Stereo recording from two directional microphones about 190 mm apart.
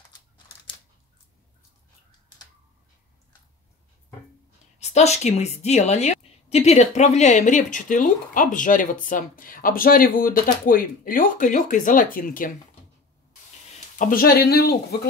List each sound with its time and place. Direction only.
4.7 s a woman's voice: 35° left (ahead or behind)
13.9 s a woman's voice: 45° left (ahead or behind)